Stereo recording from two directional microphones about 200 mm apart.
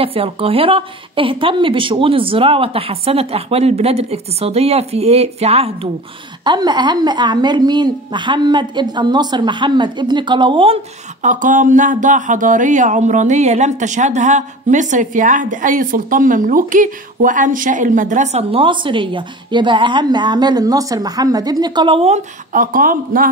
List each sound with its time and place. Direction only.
0.0 s a woman's voice: 30° right (ahead or behind)
11.2 s speech: 40° right (ahead or behind)